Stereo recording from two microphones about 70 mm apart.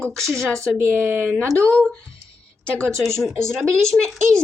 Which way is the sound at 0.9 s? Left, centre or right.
Right.